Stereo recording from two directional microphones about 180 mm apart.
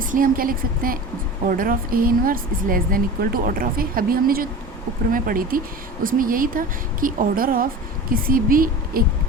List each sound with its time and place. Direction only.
0.0 s speech: 50° right (ahead or behind)